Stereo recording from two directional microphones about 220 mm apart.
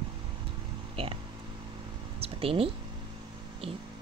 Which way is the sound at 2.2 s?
25° right (ahead or behind).